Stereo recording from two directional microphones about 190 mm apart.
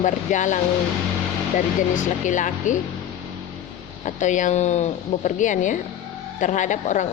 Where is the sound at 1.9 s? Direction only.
40° left (ahead or behind).